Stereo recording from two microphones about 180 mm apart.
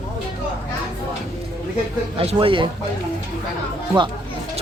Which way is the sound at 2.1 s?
30° right (ahead or behind).